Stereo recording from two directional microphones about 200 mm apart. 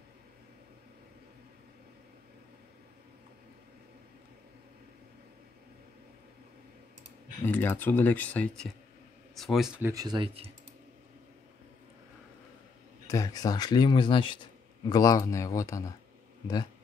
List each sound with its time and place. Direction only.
7.4 s speech: 10° left (ahead or behind); by 10.5 s 25° right (ahead or behind)
13.0 s speech: 15° left (ahead or behind)